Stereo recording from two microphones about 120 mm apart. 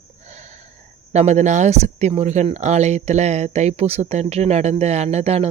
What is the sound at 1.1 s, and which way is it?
Speech, 70° right (ahead or behind).